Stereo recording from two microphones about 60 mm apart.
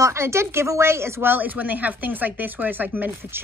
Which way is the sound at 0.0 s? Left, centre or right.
Right.